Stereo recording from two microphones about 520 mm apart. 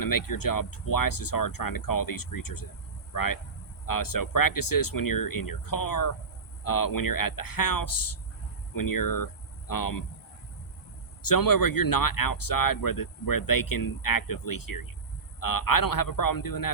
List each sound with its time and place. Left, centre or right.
0.0 s speech: left
11.2 s speech: left